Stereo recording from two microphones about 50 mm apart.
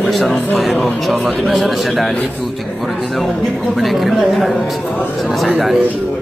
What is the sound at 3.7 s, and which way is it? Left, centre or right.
Speech, centre.